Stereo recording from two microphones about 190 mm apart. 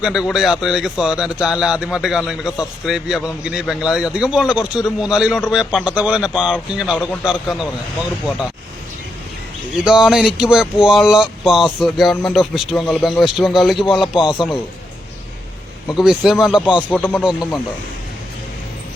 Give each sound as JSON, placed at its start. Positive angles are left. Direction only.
{"t": 0.0, "sound": "speech", "side_deg": 0}
{"t": 9.8, "sound": "speech", "side_deg": -5}
{"t": 14.0, "sound": "speech", "side_deg": 25}
{"t": 15.9, "sound": "speech", "side_deg": 0}
{"t": 17.2, "sound": "speech", "side_deg": -5}